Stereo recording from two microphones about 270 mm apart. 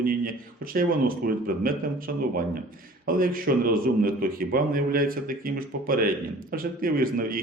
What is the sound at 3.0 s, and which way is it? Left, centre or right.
A man's voice, right.